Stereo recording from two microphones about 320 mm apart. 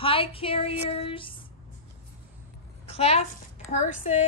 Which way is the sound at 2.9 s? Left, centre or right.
Centre.